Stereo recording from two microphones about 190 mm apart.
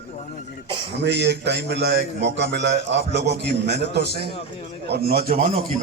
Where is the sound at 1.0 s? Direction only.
60° right (ahead or behind).